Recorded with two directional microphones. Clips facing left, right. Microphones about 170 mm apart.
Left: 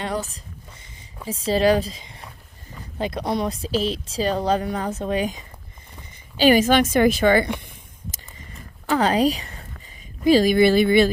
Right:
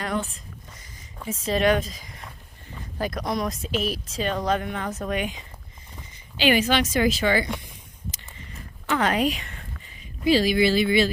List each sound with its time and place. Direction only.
0.0 s a woman's voice: 35° left (ahead or behind); by 7.5 s 50° left (ahead or behind)
8.9 s a woman's voice: 35° left (ahead or behind)
10.2 s a woman's voice: 45° left (ahead or behind)